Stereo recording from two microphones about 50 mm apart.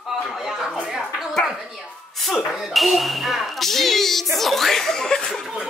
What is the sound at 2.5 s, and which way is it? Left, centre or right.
Speech, centre.